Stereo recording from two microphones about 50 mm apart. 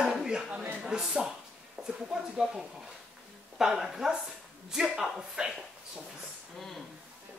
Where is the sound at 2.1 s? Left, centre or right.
Centre.